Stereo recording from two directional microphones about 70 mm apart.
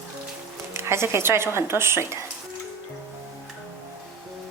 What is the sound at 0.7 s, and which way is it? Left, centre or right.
Speech, right.